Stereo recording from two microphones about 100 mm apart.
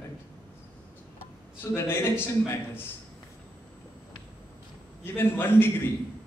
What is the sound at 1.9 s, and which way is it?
Speech, 20° left (ahead or behind).